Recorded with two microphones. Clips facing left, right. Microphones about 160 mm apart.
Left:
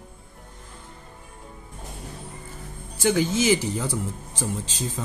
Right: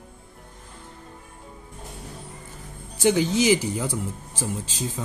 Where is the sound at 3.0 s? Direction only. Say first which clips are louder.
Right 1 dB; 15° right (ahead or behind).